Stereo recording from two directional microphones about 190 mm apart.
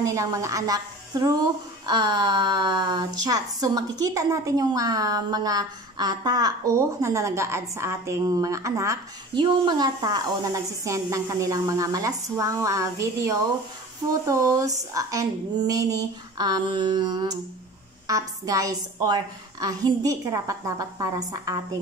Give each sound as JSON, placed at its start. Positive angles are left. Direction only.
{"t": 0.0, "sound": "a woman's voice", "side_deg": -15}